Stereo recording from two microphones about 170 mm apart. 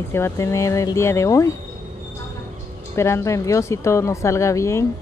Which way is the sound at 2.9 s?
15° left (ahead or behind).